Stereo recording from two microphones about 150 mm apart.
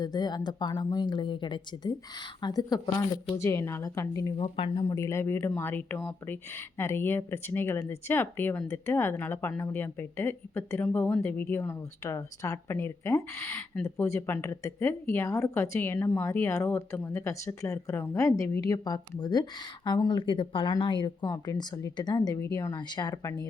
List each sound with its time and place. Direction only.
0.0 s speech: 30° left (ahead or behind)
4.4 s speech: 35° left (ahead or behind)
4.9 s speech: 20° left (ahead or behind)